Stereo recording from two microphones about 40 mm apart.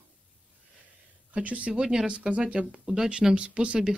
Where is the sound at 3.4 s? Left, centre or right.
Right.